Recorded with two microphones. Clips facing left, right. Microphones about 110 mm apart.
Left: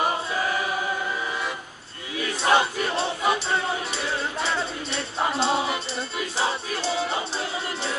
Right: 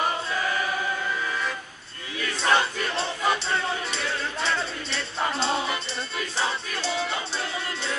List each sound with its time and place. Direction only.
0.3 s choir: 20° left (ahead or behind)
2.1 s a sound: 20° left (ahead or behind)
3.3 s music: 15° left (ahead or behind)